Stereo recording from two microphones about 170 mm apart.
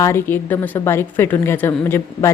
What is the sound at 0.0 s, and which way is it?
A woman's voice, 15° left (ahead or behind).